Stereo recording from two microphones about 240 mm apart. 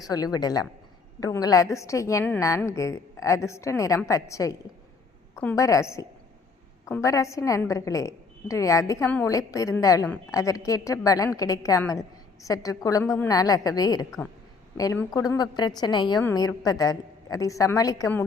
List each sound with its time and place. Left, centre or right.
0.0 s a woman's voice: centre